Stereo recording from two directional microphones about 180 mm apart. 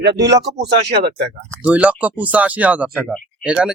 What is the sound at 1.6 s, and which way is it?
Speech, 10° right (ahead or behind).